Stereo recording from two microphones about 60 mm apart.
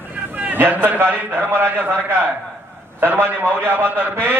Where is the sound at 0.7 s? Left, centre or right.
Right.